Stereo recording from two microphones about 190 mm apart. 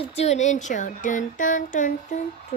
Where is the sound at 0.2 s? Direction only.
35° left (ahead or behind).